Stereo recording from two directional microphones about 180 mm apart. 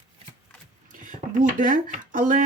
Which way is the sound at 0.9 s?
45° right (ahead or behind).